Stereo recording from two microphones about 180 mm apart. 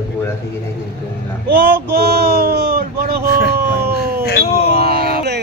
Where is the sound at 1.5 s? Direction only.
65° right (ahead or behind).